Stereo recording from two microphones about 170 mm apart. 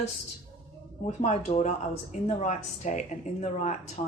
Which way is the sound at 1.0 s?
40° left (ahead or behind).